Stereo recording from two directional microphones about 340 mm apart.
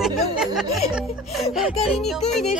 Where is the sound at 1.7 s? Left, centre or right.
Centre.